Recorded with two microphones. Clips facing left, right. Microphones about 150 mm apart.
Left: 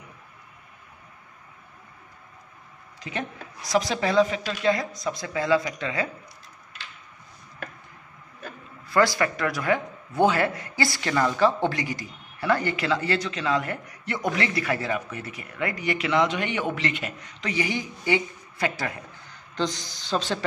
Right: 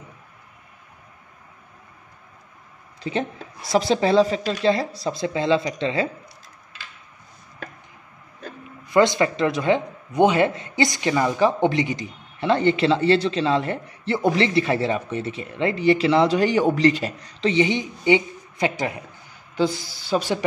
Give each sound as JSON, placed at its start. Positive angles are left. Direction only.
{"t": 3.0, "sound": "speech", "side_deg": -30}
{"t": 8.8, "sound": "speech", "side_deg": -20}
{"t": 19.5, "sound": "speech", "side_deg": -10}